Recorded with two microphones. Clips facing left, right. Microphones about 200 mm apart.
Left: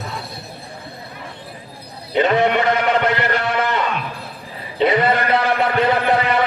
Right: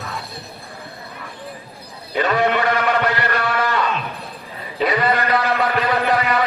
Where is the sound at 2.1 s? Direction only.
20° left (ahead or behind).